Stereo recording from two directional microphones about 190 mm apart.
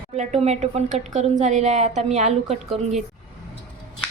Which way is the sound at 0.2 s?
35° right (ahead or behind).